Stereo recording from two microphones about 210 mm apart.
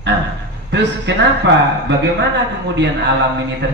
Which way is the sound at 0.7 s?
55° right (ahead or behind).